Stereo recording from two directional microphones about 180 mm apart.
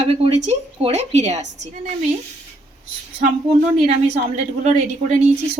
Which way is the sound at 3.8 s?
40° right (ahead or behind).